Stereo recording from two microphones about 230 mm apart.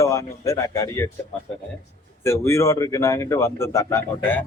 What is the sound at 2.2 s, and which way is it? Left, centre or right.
Speech, centre.